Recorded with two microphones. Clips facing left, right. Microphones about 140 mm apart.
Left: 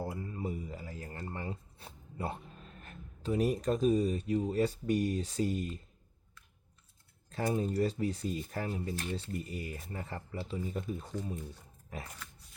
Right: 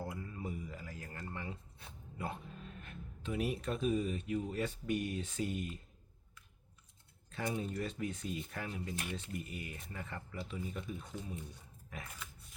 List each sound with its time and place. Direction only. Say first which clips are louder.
0.0 s a sound: left 5 dB; 30° left (ahead or behind)
2.8 s speech: left 8 dB; 40° left (ahead or behind)
7.3 s speech: left 6 dB; 40° left (ahead or behind)